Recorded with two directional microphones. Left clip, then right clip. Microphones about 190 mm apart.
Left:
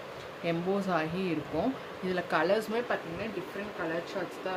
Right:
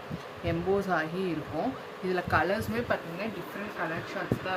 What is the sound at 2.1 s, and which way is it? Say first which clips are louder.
Speech: right 2 dB; 25° left (ahead or behind).